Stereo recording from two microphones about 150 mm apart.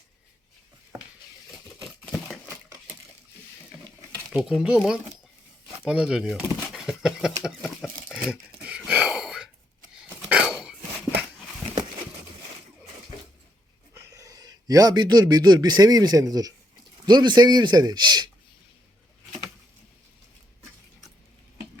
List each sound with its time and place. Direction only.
1.5 s crumpling: 5° right (ahead or behind)
4.3 s speech: 5° right (ahead or behind)
5.8 s a sound: 5° right (ahead or behind)
10.1 s throat clearing: 10° right (ahead or behind)
13.9 s a man's voice: 15° right (ahead or behind)